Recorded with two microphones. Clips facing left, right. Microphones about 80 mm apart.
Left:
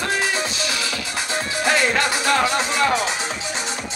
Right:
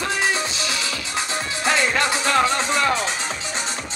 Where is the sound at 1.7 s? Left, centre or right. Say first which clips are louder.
Left 1 dB; right.